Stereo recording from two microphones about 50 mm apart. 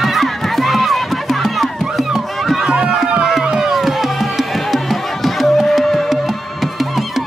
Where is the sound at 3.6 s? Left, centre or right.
Centre.